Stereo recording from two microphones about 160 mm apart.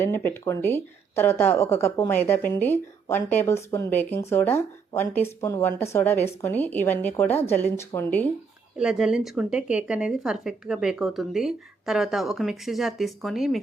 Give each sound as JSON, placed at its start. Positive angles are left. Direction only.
{"t": 0.0, "sound": "speech", "side_deg": 15}
{"t": 8.8, "sound": "speech", "side_deg": -5}